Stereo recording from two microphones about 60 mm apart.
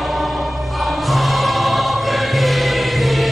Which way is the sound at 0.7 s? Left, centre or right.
Centre.